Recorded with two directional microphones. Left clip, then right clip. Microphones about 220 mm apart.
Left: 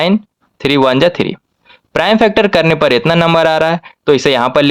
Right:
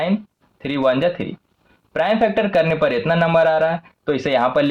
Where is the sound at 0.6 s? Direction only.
50° left (ahead or behind).